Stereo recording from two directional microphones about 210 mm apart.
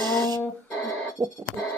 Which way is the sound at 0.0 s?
20° right (ahead or behind).